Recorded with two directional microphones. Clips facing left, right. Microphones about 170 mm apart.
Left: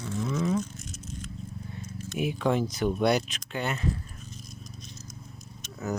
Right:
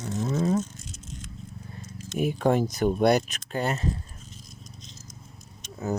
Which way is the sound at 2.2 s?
45° right (ahead or behind).